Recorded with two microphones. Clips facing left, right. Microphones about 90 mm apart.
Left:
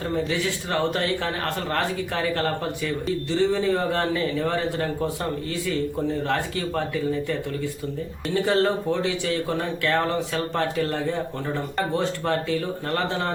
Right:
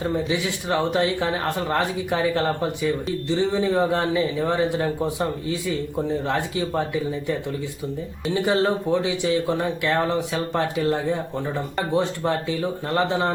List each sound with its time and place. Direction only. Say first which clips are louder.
0.0 s speech: right 1 dB; 15° right (ahead or behind)